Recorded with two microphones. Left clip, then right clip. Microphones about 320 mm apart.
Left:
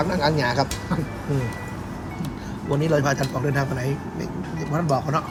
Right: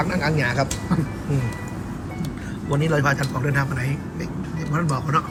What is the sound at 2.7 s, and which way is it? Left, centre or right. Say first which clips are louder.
Speech: even; centre.